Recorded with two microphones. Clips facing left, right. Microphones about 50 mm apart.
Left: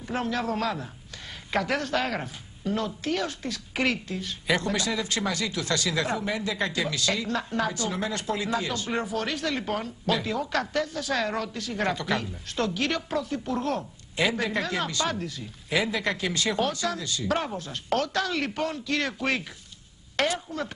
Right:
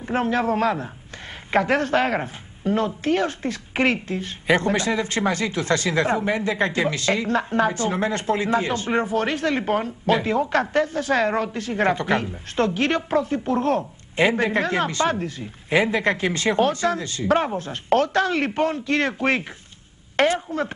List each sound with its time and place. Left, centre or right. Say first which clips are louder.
0.0 s speech: right 7 dB; right